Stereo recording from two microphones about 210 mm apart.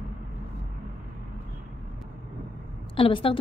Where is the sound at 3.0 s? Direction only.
25° left (ahead or behind).